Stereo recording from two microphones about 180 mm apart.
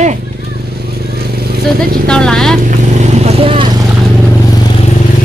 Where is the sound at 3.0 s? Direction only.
35° right (ahead or behind).